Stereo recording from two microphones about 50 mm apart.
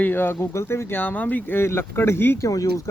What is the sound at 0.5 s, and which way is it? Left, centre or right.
Speech, left.